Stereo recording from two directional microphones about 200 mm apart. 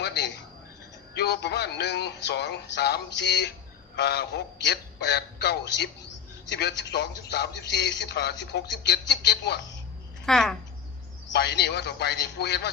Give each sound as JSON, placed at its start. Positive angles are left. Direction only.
{"t": 0.0, "sound": "a sound", "side_deg": 60}
{"t": 1.1, "sound": "a man's voice", "side_deg": 55}
{"t": 10.2, "sound": "speech", "side_deg": 0}
{"t": 11.3, "sound": "a man's voice", "side_deg": 55}